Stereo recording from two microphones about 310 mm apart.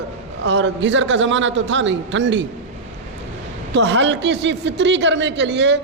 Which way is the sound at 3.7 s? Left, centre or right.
Right.